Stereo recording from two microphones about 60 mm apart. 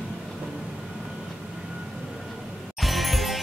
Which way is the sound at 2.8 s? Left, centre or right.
Centre.